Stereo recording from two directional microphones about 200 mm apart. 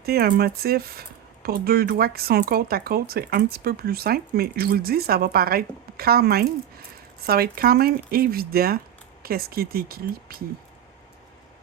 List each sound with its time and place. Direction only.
0.0 s speech: 50° right (ahead or behind)